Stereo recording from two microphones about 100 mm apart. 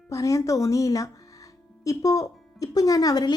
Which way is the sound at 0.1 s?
35° left (ahead or behind).